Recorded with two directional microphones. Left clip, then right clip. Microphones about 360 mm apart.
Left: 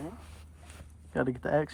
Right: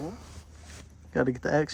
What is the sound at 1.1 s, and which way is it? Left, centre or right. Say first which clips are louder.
Speech: right 3 dB; centre.